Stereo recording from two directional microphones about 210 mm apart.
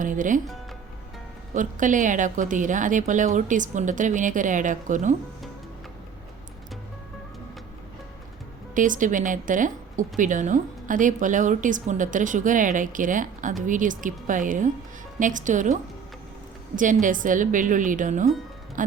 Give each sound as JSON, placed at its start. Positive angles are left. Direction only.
{"t": 0.0, "sound": "speech", "side_deg": -40}
{"t": 1.5, "sound": "speech", "side_deg": -40}
{"t": 8.7, "sound": "speech", "side_deg": -40}
{"t": 18.8, "sound": "music", "side_deg": -40}